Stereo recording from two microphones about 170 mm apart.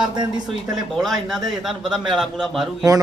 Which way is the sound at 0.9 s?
Centre (ahead or behind).